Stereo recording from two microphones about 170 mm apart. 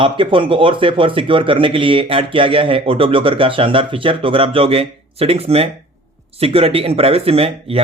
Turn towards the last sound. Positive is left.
turn(degrees=-35)  # may be behind; listen again after turning